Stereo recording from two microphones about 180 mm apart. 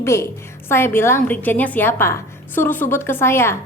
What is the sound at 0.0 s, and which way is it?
A woman's voice, 15° left (ahead or behind).